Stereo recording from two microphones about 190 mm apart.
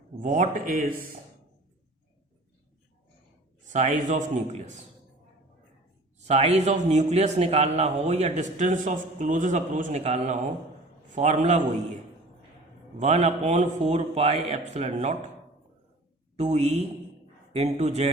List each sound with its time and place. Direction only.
0.2 s a man's voice: 40° right (ahead or behind)
3.7 s a man's voice: 40° right (ahead or behind)
6.2 s a man's voice: 35° right (ahead or behind)
13.0 s a man's voice: 35° right (ahead or behind)
16.4 s a man's voice: 35° right (ahead or behind)